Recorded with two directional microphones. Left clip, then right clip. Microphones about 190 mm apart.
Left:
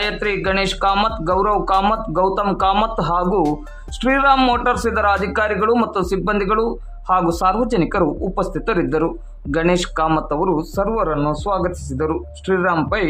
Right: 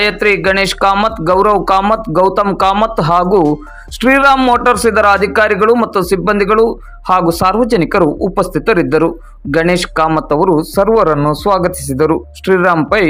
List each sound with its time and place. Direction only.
0.0 s speech: 25° right (ahead or behind)